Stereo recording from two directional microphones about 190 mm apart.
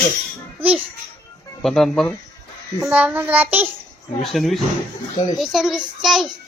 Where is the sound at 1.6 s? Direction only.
Centre (ahead or behind).